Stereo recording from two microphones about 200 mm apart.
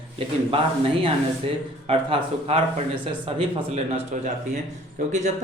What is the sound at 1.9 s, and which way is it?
Speech, 30° right (ahead or behind).